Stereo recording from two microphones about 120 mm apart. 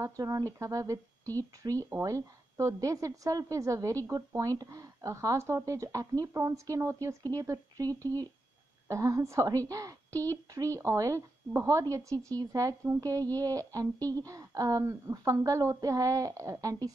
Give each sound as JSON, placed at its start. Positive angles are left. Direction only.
{"t": 0.0, "sound": "a woman's voice", "side_deg": -30}